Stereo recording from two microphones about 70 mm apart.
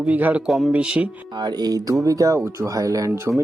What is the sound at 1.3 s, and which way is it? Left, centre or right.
Speech, right.